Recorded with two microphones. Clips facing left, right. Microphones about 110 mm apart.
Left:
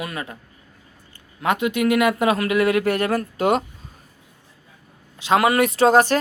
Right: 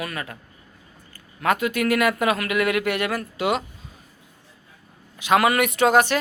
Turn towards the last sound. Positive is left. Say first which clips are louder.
# left 3 dB
turn(degrees=35)  # may be behind; listen again after turning